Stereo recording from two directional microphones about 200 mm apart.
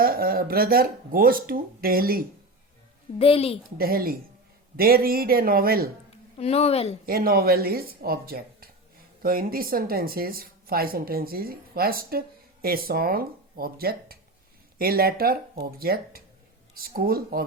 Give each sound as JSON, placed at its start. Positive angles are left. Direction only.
{"t": 0.0, "sound": "speech", "side_deg": -45}
{"t": 3.2, "sound": "a woman's voice", "side_deg": 30}
{"t": 3.8, "sound": "speech", "side_deg": -50}
{"t": 6.3, "sound": "a woman's voice", "side_deg": 30}
{"t": 7.0, "sound": "speech", "side_deg": -45}